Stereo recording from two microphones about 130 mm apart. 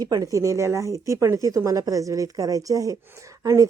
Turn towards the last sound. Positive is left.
turn(degrees=-25)  # may be behind; listen again after turning